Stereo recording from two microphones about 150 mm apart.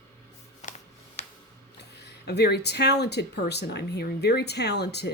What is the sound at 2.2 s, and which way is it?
A woman's voice, 90° left.